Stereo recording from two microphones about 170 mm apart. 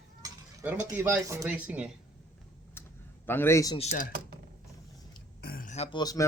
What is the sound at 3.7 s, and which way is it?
Speech, 40° left (ahead or behind).